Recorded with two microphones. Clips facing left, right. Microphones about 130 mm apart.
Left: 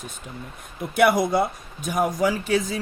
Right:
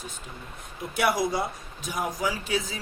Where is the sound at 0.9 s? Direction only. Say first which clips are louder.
Left 6 dB; 55° left (ahead or behind).